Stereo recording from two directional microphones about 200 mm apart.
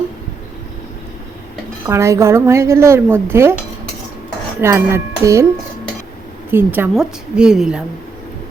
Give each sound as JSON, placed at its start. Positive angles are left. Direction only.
{"t": 1.9, "sound": "speech", "side_deg": -15}
{"t": 4.6, "sound": "speech", "side_deg": -15}
{"t": 6.5, "sound": "a woman's voice", "side_deg": -10}